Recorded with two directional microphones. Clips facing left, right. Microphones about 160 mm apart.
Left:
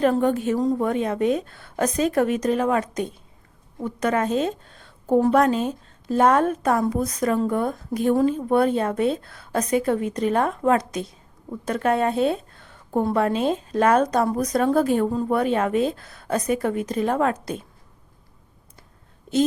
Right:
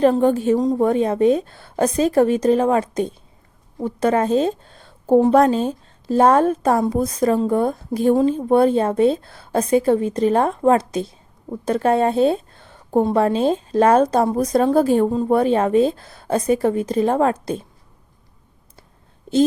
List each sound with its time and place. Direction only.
0.0 s a woman's voice: 30° right (ahead or behind)